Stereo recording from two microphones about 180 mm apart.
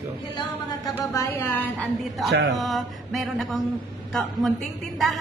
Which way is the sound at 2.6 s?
Centre (ahead or behind).